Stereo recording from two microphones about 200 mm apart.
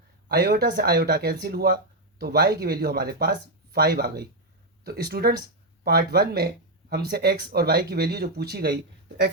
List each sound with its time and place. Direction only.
0.3 s speech: 50° right (ahead or behind)